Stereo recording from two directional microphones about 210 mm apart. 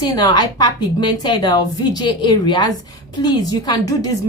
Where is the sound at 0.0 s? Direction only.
20° left (ahead or behind).